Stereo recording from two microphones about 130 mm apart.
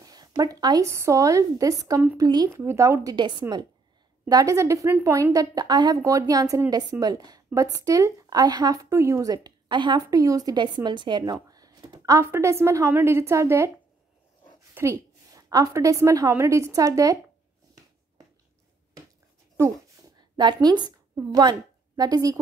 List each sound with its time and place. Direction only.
0.0 s a woman's voice: 30° right (ahead or behind)
14.7 s a woman's voice: 20° right (ahead or behind)
19.6 s speech: 20° right (ahead or behind)
20.3 s a woman's voice: 35° right (ahead or behind)